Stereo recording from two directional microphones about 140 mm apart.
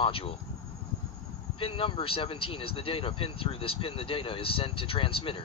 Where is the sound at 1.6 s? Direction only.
40° left (ahead or behind).